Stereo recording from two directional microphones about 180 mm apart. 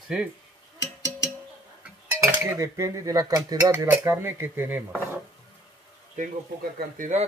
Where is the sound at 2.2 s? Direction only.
15° right (ahead or behind).